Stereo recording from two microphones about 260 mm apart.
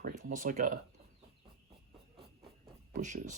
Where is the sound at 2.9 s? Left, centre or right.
Right.